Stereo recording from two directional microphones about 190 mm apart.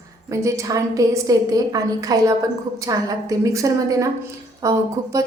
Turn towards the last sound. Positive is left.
turn(degrees=-20)  # may be behind; listen again after turning